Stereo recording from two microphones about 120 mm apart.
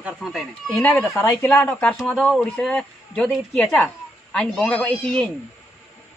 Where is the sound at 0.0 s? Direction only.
Centre (ahead or behind).